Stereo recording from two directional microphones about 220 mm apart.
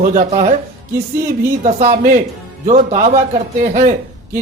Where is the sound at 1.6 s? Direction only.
30° right (ahead or behind).